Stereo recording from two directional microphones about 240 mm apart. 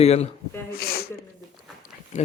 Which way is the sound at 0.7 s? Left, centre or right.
Left.